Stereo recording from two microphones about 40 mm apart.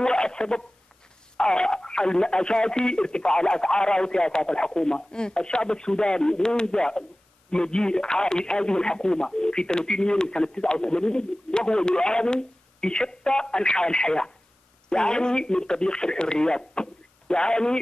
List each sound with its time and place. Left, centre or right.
0.0 s speech: centre